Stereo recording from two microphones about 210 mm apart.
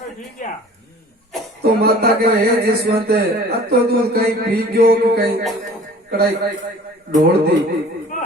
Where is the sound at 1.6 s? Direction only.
50° right (ahead or behind).